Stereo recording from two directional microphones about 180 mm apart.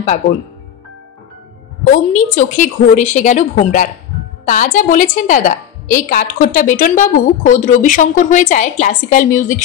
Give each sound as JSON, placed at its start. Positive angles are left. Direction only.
{"t": 1.9, "sound": "a woman's voice", "side_deg": 50}